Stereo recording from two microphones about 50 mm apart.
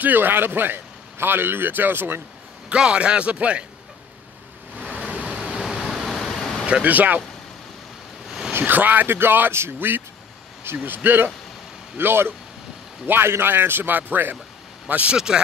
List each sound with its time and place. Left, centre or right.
0.0 s a man's voice: right
2.7 s speech: right
4.8 s a sound: left
5.2 s vehicle: right
5.6 s vehicle: centre
6.6 s speech: right
8.3 s a sound: centre
8.5 s a man's voice: right
14.9 s speech: right
15.1 s speech: centre